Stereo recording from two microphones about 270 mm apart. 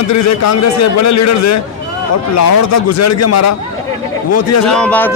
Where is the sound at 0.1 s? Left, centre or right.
Left.